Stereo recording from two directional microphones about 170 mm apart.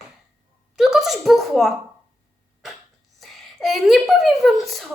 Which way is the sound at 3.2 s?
Centre (ahead or behind).